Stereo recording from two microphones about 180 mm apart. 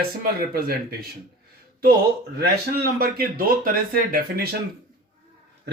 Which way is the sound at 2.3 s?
60° right (ahead or behind).